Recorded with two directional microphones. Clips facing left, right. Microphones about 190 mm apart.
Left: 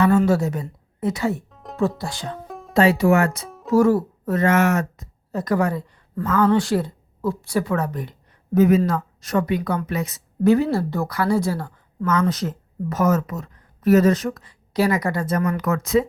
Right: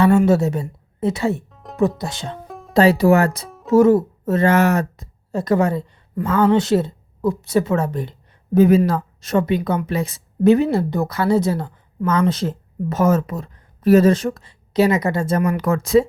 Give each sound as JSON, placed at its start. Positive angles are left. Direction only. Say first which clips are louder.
{"t": 0.3, "sound": "a woman's voice", "louder": "right 3 dB", "side_deg": -25}
{"t": 1.5, "sound": "music", "louder": "even", "side_deg": 0}
{"t": 2.0, "sound": "speech", "louder": "right 2 dB", "side_deg": -20}
{"t": 2.5, "sound": "music", "louder": "even", "side_deg": 0}
{"t": 2.7, "sound": "speech", "louder": "right 3 dB", "side_deg": -35}
{"t": 3.7, "sound": "speech", "louder": "right 4 dB", "side_deg": -20}